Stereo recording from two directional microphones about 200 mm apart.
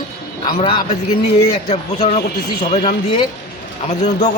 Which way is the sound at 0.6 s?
25° left (ahead or behind).